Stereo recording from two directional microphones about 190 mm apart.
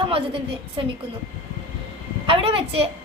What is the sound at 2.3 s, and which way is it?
Speech, 30° right (ahead or behind).